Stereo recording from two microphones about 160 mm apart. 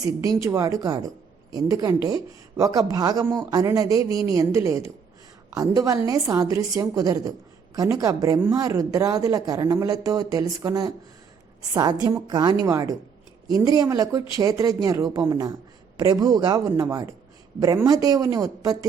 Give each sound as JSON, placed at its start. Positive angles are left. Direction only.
{"t": 0.0, "sound": "speech", "side_deg": -20}